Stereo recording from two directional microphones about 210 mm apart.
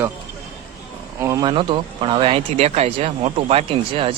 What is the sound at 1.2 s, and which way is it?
Speech, 15° right (ahead or behind).